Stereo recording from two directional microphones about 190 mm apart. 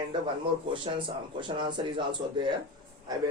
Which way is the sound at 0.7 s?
30° right (ahead or behind).